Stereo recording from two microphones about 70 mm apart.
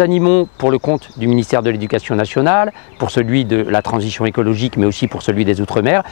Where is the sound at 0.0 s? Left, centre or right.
Centre.